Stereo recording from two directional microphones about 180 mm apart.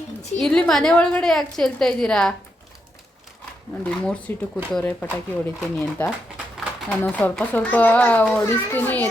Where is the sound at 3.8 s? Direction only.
5° left (ahead or behind).